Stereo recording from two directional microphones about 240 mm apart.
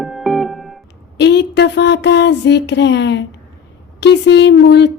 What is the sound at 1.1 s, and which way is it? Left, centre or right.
Speech, left.